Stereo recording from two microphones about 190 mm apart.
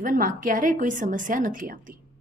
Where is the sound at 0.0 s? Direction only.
45° right (ahead or behind).